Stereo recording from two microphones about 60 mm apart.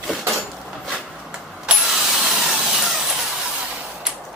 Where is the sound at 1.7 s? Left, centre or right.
Centre.